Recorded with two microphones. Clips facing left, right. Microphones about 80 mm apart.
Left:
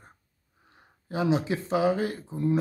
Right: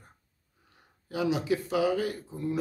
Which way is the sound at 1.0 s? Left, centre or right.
Left.